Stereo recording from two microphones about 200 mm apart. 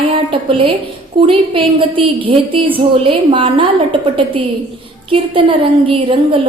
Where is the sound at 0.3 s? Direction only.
25° right (ahead or behind).